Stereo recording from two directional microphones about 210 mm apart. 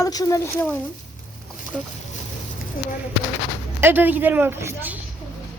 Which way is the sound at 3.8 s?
10° right (ahead or behind).